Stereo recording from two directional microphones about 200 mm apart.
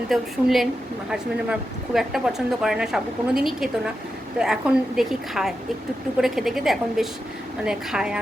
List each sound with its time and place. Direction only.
0.1 s speech: centre (ahead or behind)